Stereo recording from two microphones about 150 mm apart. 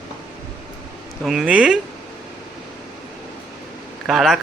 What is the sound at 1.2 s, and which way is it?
Speech, 5° right (ahead or behind).